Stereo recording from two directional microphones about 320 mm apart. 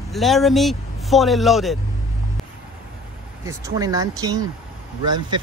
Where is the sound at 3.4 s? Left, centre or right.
Centre.